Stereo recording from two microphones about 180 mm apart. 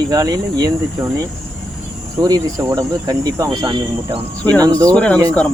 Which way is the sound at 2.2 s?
20° right (ahead or behind).